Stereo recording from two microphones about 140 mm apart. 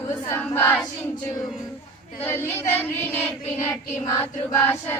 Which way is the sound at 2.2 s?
15° left (ahead or behind).